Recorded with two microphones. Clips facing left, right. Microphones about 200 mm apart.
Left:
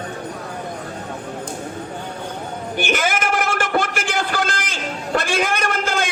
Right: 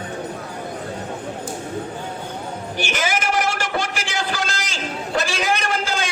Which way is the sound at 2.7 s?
55° left (ahead or behind).